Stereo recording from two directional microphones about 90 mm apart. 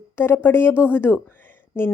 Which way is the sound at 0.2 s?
25° left (ahead or behind).